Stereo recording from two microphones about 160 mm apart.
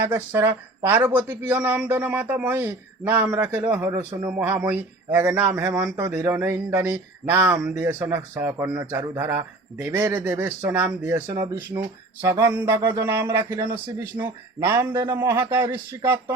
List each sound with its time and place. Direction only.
0.1 s speech: 10° right (ahead or behind)